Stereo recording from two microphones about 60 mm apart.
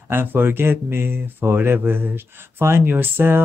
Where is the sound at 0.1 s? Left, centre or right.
Right.